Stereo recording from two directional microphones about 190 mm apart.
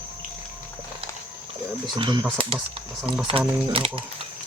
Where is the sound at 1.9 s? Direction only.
25° right (ahead or behind).